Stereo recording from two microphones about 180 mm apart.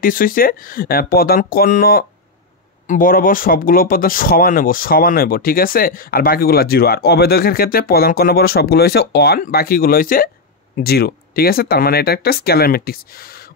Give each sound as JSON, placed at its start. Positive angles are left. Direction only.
{"t": 0.0, "sound": "speech", "side_deg": 50}